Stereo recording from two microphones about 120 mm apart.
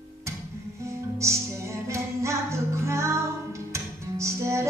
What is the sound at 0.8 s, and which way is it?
Music, 25° right (ahead or behind).